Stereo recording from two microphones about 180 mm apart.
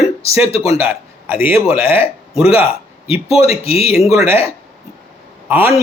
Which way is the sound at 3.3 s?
35° left (ahead or behind).